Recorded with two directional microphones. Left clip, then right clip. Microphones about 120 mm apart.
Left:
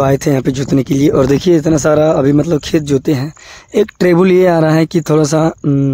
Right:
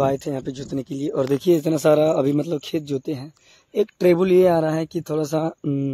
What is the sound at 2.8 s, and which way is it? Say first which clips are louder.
Speech: left 13 dB; 25° left (ahead or behind).